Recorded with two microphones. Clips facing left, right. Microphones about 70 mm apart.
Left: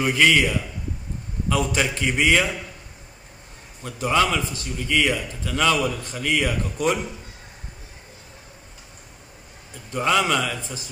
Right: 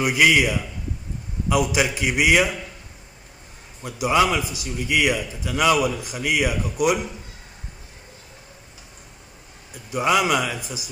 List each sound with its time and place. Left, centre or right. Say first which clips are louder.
0.0 s a man's voice: right 1 dB; centre
3.8 s a man's voice: right 2 dB; centre
9.8 s a man's voice: right 1 dB; centre